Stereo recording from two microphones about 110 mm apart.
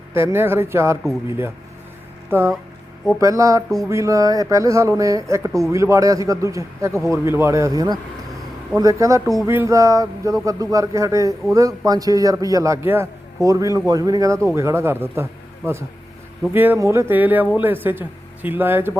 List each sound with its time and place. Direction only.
0.1 s a man's voice: 20° right (ahead or behind)
2.3 s a man's voice: 25° right (ahead or behind)